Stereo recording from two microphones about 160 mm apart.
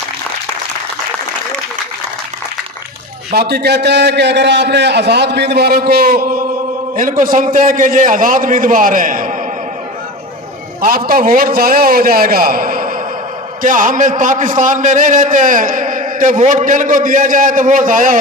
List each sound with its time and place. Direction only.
3.3 s a man's voice: 90° right; by 9.4 s 55° right (ahead or behind)
10.8 s a man's voice: 65° right (ahead or behind)